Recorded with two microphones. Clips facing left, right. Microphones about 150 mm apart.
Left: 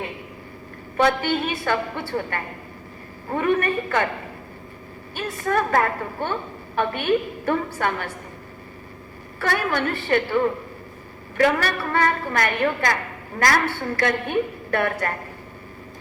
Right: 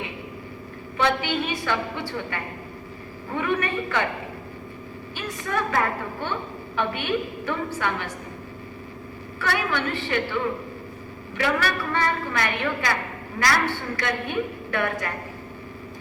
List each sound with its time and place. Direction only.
0.9 s a woman's voice: 45° left (ahead or behind)
5.1 s a woman's voice: 45° left (ahead or behind)
9.4 s a woman's voice: 45° left (ahead or behind)